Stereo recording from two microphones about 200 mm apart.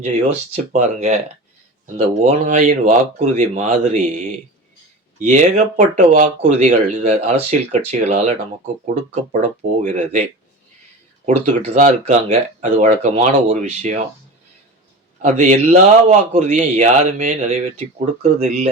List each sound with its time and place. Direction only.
0.5 s speech: 35° right (ahead or behind)
11.3 s speech: 35° right (ahead or behind)
15.2 s speech: 40° right (ahead or behind)